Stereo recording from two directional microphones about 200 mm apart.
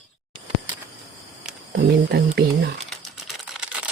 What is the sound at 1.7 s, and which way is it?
Speech, 55° right (ahead or behind).